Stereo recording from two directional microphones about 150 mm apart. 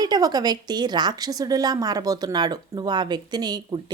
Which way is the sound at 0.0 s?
25° right (ahead or behind).